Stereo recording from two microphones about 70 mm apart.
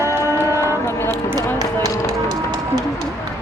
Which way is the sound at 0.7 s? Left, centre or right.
Left.